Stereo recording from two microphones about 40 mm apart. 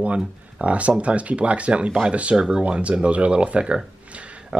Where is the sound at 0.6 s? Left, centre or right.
Right.